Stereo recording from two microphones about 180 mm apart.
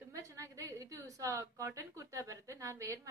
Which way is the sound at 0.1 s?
15° right (ahead or behind).